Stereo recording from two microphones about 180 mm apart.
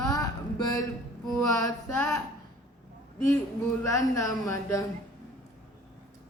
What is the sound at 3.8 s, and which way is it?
Speech, 15° left (ahead or behind).